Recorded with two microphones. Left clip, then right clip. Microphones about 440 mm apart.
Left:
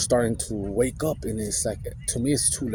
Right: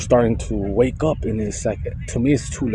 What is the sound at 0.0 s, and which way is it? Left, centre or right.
Speech, left.